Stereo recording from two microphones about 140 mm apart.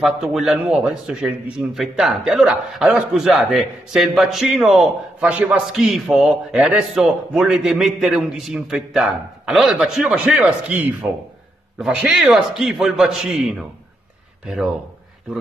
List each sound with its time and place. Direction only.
0.0 s speech: centre (ahead or behind)